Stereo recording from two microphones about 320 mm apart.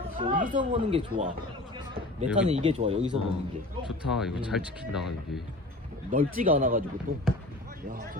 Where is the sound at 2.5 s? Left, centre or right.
Centre.